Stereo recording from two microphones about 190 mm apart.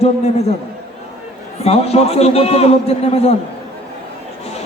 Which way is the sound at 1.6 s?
30° left (ahead or behind).